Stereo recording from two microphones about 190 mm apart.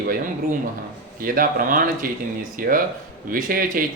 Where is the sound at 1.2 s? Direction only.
50° right (ahead or behind).